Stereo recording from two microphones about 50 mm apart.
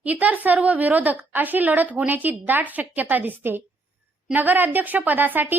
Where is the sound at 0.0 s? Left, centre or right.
Right.